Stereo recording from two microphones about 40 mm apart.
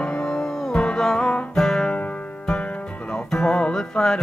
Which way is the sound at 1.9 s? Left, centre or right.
Left.